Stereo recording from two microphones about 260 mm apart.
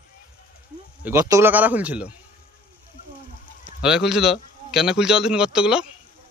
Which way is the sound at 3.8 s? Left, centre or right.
Centre.